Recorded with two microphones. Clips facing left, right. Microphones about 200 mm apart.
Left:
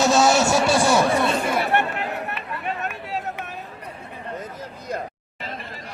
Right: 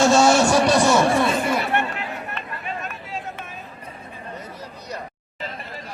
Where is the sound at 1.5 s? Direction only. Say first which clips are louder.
Left 1 dB; 60° left (ahead or behind).